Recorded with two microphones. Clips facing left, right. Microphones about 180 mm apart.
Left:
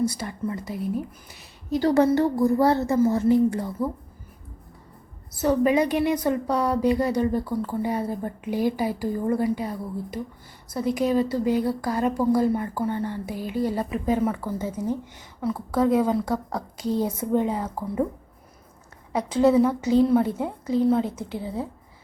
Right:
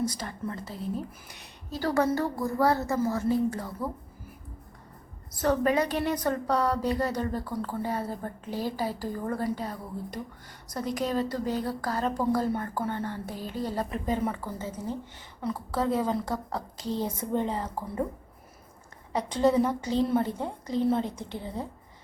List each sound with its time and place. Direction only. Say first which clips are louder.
0.0 s a woman's voice: left 5 dB; 10° left (ahead or behind)
5.4 s a woman's voice: left 4 dB; 10° left (ahead or behind)
19.1 s a woman's voice: left 5 dB; 10° left (ahead or behind)